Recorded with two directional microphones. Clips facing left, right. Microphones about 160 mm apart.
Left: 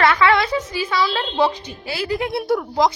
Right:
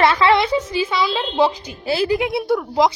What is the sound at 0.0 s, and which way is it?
A woman's voice, 25° right (ahead or behind).